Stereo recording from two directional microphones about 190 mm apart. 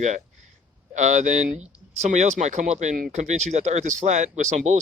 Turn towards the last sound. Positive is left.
turn(degrees=-40)  # may be behind; listen again after turning